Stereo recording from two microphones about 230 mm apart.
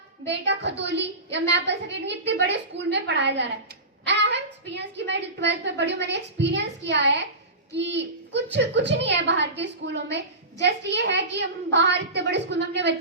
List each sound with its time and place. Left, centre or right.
0.3 s a child's voice: right
4.0 s a sound: right
4.9 s a child's voice: right